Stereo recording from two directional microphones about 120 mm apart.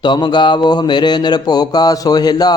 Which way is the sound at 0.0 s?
40° left (ahead or behind).